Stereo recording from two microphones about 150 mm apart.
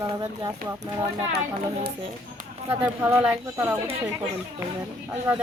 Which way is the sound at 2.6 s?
15° right (ahead or behind).